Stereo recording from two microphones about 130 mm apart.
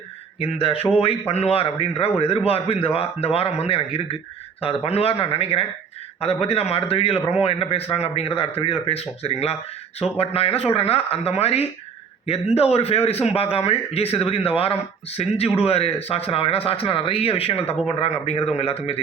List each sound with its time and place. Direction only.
0.3 s a man's voice: 45° left (ahead or behind)